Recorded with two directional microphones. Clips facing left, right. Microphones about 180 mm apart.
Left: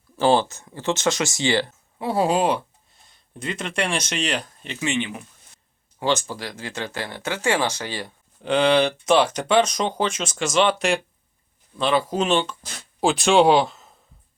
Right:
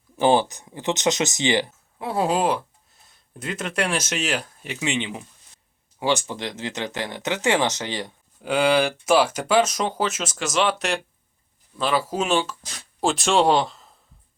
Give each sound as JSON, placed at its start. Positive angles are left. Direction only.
{"t": 0.2, "sound": "speech", "side_deg": -15}
{"t": 2.0, "sound": "speech", "side_deg": 0}
{"t": 8.4, "sound": "speech", "side_deg": -5}